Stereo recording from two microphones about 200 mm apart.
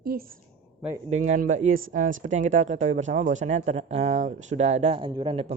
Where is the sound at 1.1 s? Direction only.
35° right (ahead or behind).